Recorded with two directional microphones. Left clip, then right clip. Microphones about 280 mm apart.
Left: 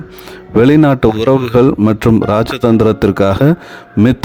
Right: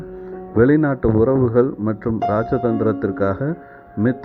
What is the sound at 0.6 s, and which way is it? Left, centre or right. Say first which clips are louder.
Speech: left 7 dB; left.